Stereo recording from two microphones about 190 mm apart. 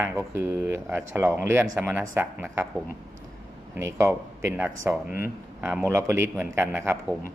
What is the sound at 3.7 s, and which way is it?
Speech, 15° right (ahead or behind).